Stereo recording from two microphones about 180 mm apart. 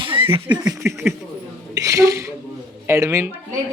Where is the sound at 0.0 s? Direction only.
30° right (ahead or behind).